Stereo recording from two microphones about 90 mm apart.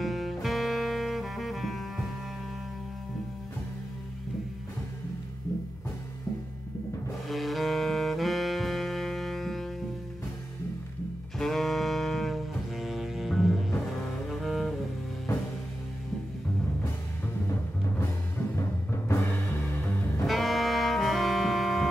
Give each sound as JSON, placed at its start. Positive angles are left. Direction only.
{"t": 0.0, "sound": "music", "side_deg": 0}
{"t": 7.2, "sound": "saxophone", "side_deg": 0}
{"t": 11.3, "sound": "music", "side_deg": 5}
{"t": 14.3, "sound": "double bass", "side_deg": 0}
{"t": 18.6, "sound": "timpani", "side_deg": 30}
{"t": 20.2, "sound": "music", "side_deg": 0}